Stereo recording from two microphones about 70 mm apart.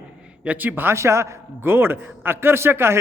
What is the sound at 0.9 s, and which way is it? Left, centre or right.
A man's voice, right.